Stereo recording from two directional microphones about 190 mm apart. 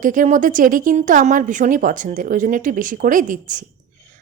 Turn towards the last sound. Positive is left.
turn(degrees=-45)  # may be behind; listen again after turning